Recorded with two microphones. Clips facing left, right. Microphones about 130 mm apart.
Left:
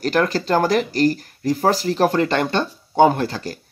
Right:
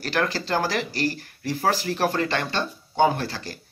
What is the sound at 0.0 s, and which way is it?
Speech, 45° left (ahead or behind).